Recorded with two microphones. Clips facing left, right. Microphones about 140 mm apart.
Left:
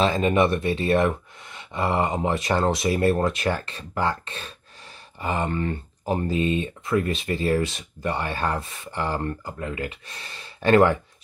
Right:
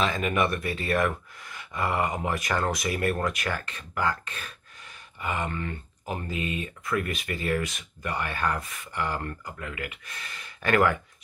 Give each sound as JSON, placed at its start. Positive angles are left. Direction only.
{"t": 0.0, "sound": "speech", "side_deg": 30}